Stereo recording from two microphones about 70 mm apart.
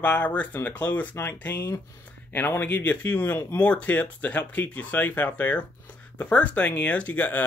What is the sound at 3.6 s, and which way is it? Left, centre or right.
Speech, centre.